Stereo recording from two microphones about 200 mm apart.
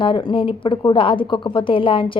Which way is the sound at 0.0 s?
25° left (ahead or behind).